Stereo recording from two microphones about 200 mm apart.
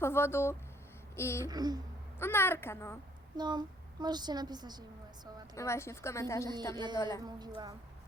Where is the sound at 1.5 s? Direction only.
20° right (ahead or behind).